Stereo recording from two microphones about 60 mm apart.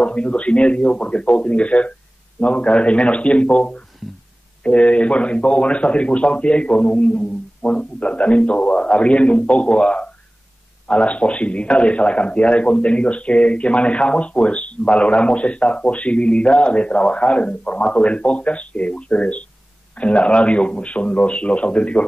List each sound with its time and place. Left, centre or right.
0.0 s a man's voice: centre